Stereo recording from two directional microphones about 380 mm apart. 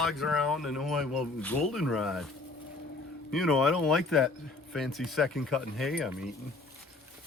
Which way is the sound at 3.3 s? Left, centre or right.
Centre.